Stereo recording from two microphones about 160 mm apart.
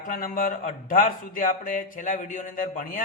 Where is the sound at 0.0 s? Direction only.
60° left (ahead or behind).